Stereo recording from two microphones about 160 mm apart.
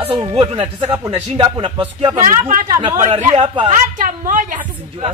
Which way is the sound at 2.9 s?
45° right (ahead or behind).